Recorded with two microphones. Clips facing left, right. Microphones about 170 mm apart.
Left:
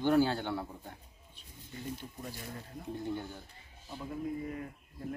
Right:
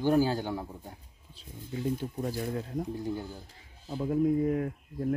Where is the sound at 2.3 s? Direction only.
55° right (ahead or behind).